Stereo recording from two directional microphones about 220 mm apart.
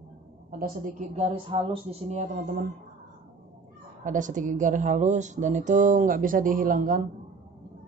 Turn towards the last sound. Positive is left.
turn(degrees=-40)  # may be behind; listen again after turning